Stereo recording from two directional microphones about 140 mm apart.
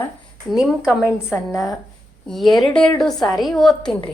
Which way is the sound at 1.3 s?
20° left (ahead or behind).